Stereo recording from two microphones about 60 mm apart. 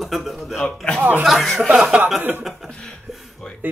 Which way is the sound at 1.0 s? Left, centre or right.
Right.